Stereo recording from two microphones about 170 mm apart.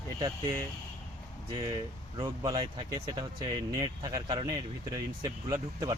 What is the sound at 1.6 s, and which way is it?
Speech, 25° right (ahead or behind).